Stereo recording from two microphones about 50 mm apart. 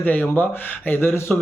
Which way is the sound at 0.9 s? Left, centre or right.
Left.